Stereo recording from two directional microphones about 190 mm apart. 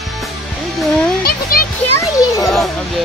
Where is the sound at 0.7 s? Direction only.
5° left (ahead or behind).